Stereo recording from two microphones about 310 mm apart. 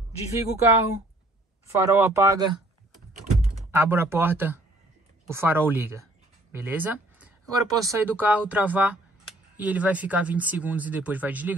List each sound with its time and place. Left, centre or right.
0.3 s speech: centre
3.1 s computer keyboard: right
3.4 s speech: centre